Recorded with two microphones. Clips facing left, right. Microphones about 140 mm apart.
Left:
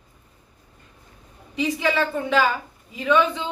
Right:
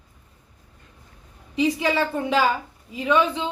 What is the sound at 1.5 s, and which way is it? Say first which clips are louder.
Speech: right 3 dB; 30° right (ahead or behind).